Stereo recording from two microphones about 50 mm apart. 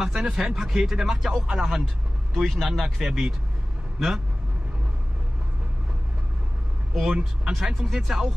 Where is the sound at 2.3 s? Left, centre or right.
Centre.